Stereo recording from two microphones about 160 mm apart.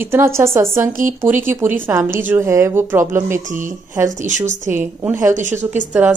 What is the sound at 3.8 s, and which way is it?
Speech, 15° right (ahead or behind).